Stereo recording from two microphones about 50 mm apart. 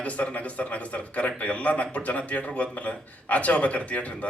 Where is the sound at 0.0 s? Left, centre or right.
Left.